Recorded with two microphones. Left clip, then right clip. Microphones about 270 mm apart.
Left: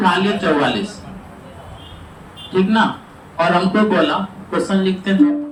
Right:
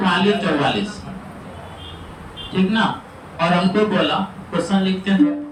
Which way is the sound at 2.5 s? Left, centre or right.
Centre.